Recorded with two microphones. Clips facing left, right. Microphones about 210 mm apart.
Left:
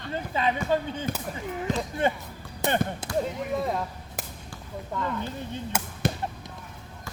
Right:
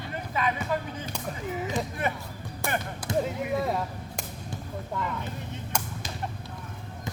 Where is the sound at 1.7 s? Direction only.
55° left (ahead or behind).